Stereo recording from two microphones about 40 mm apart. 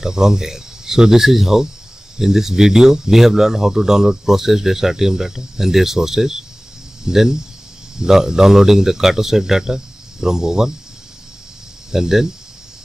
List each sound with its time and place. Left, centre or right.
0.0 s speech: centre
11.9 s speech: centre